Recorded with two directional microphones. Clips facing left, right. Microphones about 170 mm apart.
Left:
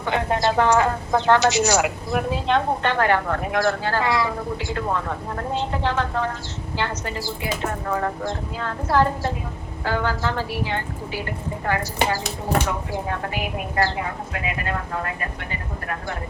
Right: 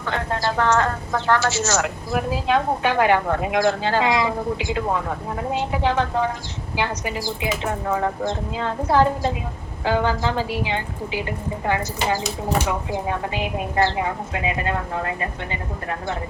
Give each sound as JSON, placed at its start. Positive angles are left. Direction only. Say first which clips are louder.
{"t": 0.0, "sound": "speech", "louder": "left 3 dB", "side_deg": 15}
{"t": 2.0, "sound": "a woman's voice", "louder": "even", "side_deg": 0}
{"t": 12.9, "sound": "a woman's voice", "louder": "right 2 dB", "side_deg": -20}